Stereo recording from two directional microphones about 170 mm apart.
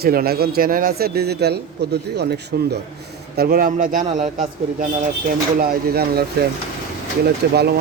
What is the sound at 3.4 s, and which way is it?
A man's voice, 60° right (ahead or behind).